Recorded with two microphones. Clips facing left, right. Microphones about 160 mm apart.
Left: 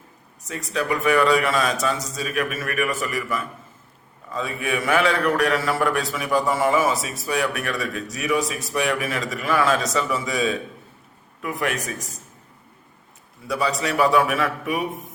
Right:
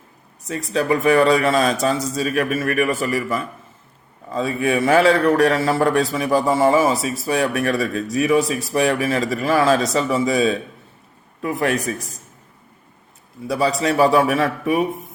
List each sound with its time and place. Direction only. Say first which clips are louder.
0.4 s a man's voice: right 5 dB; 35° right (ahead or behind)
13.5 s a man's voice: right 4 dB; 35° right (ahead or behind)